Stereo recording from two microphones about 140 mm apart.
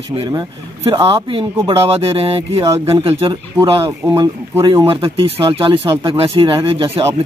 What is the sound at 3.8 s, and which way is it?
Speech, 25° right (ahead or behind).